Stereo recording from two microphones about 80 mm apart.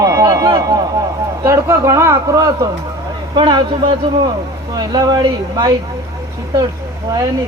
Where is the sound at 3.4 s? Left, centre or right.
Right.